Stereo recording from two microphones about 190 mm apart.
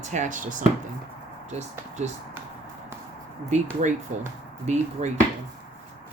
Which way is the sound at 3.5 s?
35° right (ahead or behind).